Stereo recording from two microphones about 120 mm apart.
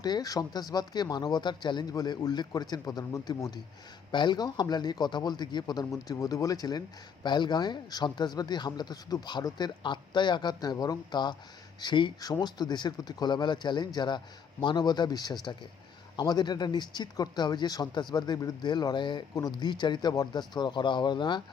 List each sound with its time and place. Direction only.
0.0 s speech: 35° left (ahead or behind)
5.8 s speech: 25° left (ahead or behind)